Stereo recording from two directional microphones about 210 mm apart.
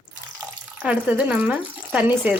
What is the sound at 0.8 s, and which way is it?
Speech, 5° right (ahead or behind).